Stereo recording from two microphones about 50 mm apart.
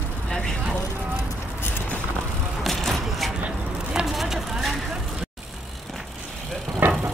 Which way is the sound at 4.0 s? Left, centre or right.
Centre.